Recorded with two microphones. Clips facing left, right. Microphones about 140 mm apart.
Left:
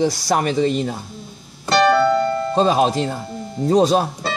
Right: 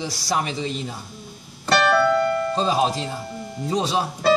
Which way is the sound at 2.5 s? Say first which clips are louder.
Left 5 dB; 60° left (ahead or behind).